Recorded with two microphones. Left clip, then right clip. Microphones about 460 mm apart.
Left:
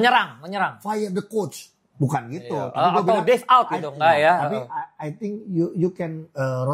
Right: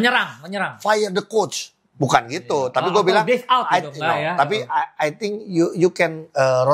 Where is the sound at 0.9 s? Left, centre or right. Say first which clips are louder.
Right 7 dB; right.